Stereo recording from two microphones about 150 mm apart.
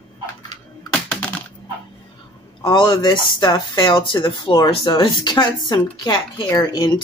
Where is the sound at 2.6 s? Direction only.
30° left (ahead or behind).